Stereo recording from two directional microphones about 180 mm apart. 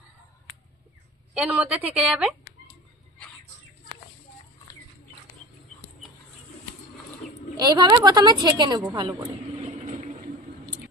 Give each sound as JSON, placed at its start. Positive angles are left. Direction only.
{"t": 1.3, "sound": "a woman's voice", "side_deg": -5}
{"t": 7.5, "sound": "a woman's voice", "side_deg": -20}
{"t": 9.8, "sound": "vehicle", "side_deg": -40}